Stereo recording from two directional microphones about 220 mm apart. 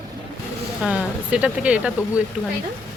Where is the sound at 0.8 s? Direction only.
5° right (ahead or behind).